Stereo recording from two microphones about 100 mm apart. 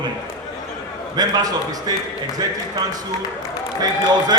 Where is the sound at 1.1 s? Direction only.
40° right (ahead or behind).